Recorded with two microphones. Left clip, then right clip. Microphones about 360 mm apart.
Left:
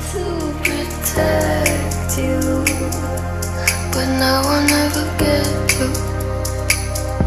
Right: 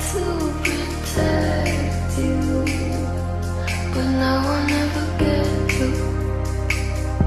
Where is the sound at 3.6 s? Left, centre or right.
Left.